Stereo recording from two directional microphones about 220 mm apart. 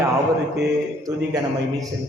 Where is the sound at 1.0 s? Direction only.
15° right (ahead or behind).